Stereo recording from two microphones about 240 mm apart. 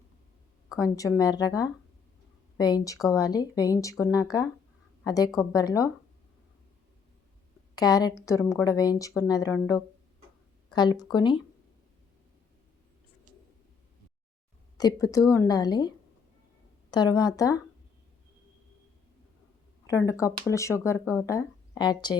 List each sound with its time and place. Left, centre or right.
0.8 s speech: centre
7.8 s speech: centre
14.8 s speech: centre
16.9 s speech: centre
19.9 s speech: centre